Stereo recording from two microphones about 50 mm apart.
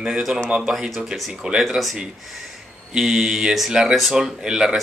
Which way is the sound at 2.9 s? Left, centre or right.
Centre.